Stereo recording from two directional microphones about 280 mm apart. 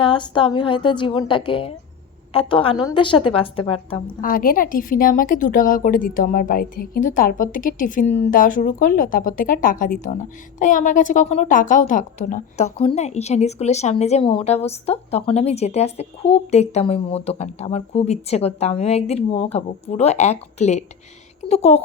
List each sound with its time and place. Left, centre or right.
0.0 s a woman's voice: centre
4.3 s a woman's voice: left